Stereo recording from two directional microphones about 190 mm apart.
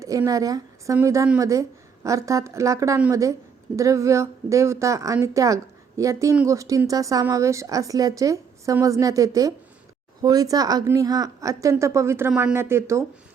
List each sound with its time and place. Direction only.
0.0 s a woman's voice: 15° right (ahead or behind)